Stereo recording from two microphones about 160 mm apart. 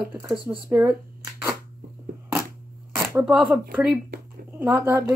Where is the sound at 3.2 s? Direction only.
5° right (ahead or behind).